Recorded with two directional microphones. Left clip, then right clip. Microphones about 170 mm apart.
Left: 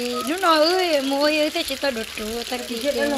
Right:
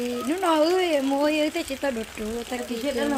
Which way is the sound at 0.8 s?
20° right (ahead or behind).